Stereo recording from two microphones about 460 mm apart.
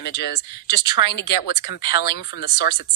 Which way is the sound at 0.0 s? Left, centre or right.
Left.